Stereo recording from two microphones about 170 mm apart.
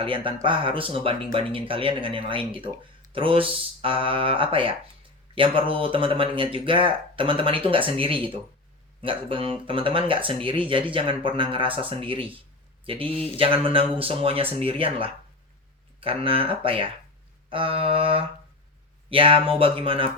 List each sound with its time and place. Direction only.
0.0 s speech: 30° right (ahead or behind)